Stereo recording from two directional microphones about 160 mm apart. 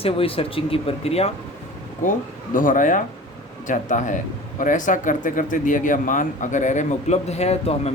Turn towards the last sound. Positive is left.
turn(degrees=40)  # may be behind; listen again after turning